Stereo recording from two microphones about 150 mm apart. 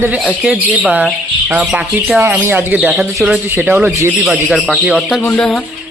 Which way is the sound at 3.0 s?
Centre (ahead or behind).